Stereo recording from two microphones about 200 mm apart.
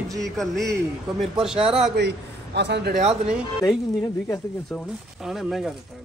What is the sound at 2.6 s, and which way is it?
Speech, 55° right (ahead or behind).